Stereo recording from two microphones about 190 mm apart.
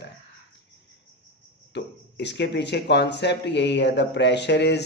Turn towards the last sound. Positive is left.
turn(degrees=65)  # may be behind; listen again after turning